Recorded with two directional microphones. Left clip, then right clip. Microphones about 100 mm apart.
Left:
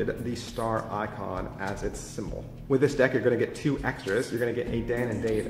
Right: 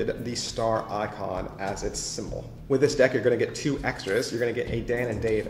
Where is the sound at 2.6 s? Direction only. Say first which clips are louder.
Right 2 dB; 35° left (ahead or behind).